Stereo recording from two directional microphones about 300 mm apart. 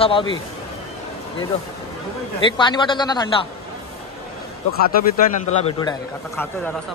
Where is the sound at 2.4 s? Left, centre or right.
Centre.